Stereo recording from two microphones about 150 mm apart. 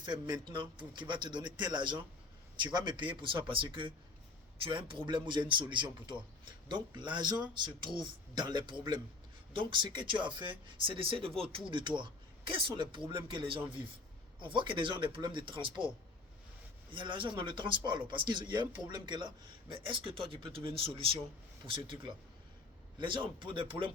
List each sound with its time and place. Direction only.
0.0 s speech: 25° right (ahead or behind)
16.9 s speech: 35° right (ahead or behind)